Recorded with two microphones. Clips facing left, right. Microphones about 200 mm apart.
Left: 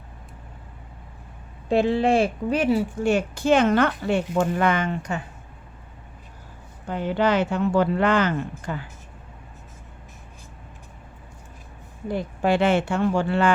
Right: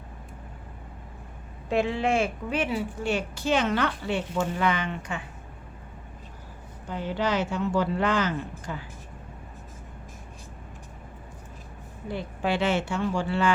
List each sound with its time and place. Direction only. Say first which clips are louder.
1.7 s a woman's voice: left 5 dB; 35° left (ahead or behind)
6.8 s speech: left 6 dB; 60° left (ahead or behind)
12.0 s speech: left 6 dB; 45° left (ahead or behind)